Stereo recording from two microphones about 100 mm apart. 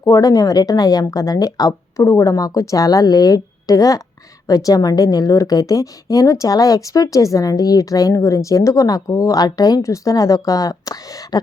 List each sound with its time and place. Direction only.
0.0 s a woman's voice: 35° left (ahead or behind)